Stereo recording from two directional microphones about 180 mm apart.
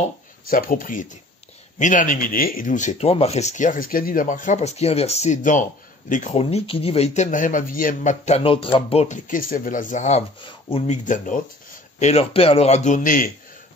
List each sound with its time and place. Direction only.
0.5 s speech: 50° left (ahead or behind)
8.4 s speech: 30° left (ahead or behind)
11.1 s speech: 45° left (ahead or behind)
12.0 s speech: 35° left (ahead or behind)